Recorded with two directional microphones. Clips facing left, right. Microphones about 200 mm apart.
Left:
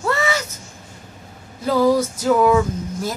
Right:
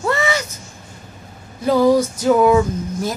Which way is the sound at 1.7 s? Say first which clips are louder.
Right 3 dB; 20° right (ahead or behind).